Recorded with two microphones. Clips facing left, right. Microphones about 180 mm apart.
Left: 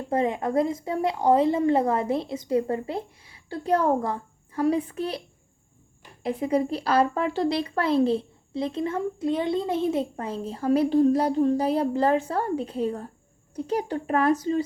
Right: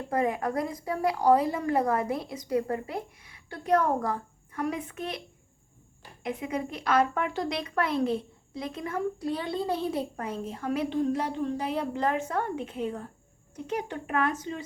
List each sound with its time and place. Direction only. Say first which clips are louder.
0.1 s a woman's voice: left 3 dB; 25° left (ahead or behind)
6.2 s a woman's voice: left 7 dB; 30° left (ahead or behind)